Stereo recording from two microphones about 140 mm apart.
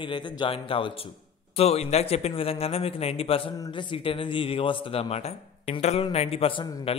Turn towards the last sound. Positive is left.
turn(degrees=40)  # may be behind; listen again after turning